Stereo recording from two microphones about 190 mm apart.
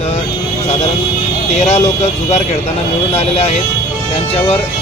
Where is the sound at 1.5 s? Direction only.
35° left (ahead or behind).